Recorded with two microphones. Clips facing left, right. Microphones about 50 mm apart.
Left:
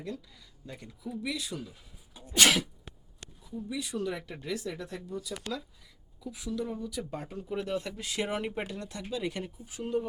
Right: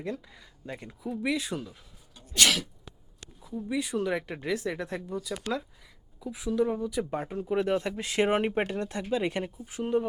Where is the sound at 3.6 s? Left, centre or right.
Right.